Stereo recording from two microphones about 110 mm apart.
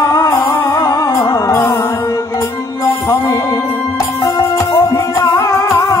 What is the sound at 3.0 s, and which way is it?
Music, 30° left (ahead or behind).